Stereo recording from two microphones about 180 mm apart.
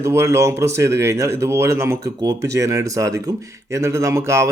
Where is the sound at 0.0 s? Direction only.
15° right (ahead or behind).